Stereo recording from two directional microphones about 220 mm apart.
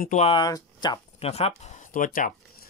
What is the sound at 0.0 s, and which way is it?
Speech, 30° left (ahead or behind).